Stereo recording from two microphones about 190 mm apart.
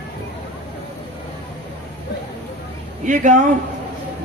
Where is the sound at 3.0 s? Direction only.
40° right (ahead or behind).